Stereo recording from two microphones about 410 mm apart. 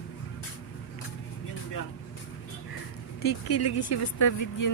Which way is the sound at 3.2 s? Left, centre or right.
Left.